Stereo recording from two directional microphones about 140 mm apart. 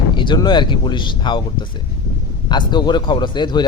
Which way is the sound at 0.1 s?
35° left (ahead or behind).